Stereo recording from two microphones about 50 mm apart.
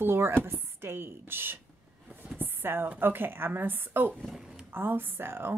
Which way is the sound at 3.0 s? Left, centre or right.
Right.